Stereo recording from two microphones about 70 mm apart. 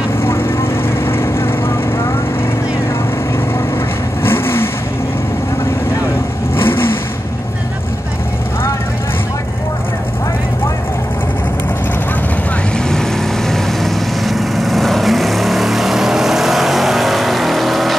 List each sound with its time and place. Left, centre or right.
0.2 s vehicle: left
4.2 s vehicle: left
6.5 s vehicle: left
12.7 s vehicle: centre